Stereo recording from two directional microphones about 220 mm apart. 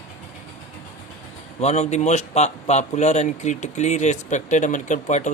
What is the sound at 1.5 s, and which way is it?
Speech, 30° left (ahead or behind).